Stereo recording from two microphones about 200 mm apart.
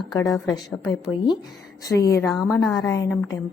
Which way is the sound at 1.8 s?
15° left (ahead or behind).